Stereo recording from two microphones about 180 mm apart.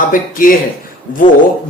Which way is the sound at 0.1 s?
50° left (ahead or behind).